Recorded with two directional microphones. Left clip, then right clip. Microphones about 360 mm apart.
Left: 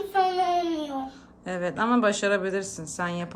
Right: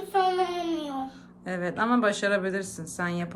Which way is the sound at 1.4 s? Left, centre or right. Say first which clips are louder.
Left 1 dB; centre.